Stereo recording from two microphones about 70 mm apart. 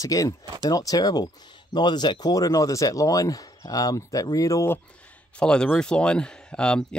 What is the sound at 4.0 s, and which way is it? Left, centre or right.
Speech, left.